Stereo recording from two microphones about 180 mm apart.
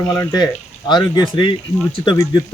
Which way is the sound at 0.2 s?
20° left (ahead or behind).